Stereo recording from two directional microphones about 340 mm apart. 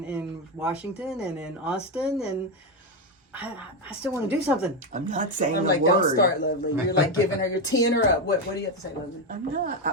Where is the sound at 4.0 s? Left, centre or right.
Centre.